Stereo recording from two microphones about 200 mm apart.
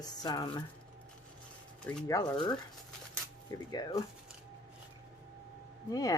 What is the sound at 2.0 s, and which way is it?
Speech, 20° left (ahead or behind).